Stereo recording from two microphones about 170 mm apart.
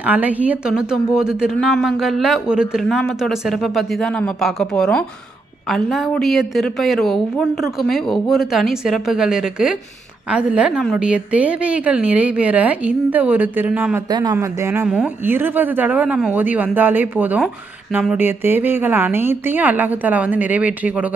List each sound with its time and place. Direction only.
0.0 s a woman's voice: 10° right (ahead or behind)
14.0 s speech: 25° right (ahead or behind); by 21.1 s 10° right (ahead or behind)